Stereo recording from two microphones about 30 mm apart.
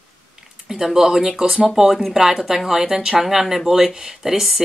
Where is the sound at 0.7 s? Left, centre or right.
Centre.